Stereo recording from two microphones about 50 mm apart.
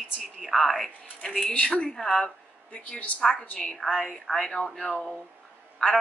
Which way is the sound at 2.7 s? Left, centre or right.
Left.